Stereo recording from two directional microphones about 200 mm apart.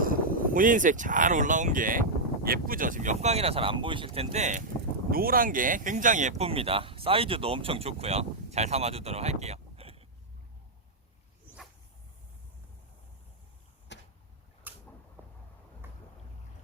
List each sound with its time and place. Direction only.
0.0 s speech: 45° right (ahead or behind)
5.1 s speech: 45° right (ahead or behind); by 10.1 s 30° right (ahead or behind)
13.9 s vehicle: 60° left (ahead or behind)
14.7 s a sound: 10° right (ahead or behind)